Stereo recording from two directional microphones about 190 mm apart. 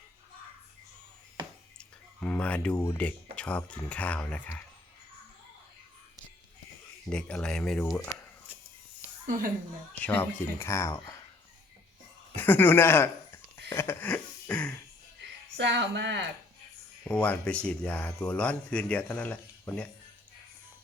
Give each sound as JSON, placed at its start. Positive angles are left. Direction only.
{"t": 1.8, "sound": "speech", "side_deg": 5}
{"t": 7.1, "sound": "speech", "side_deg": 5}
{"t": 9.2, "sound": "a woman's voice", "side_deg": -45}
{"t": 10.0, "sound": "speech", "side_deg": 10}
{"t": 12.4, "sound": "speech", "side_deg": 10}
{"t": 13.7, "sound": "a sound", "side_deg": 10}
{"t": 15.2, "sound": "speech", "side_deg": -65}
{"t": 17.0, "sound": "speech", "side_deg": 5}